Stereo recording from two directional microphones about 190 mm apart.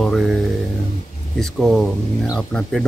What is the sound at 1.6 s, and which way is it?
Speech, centre (ahead or behind).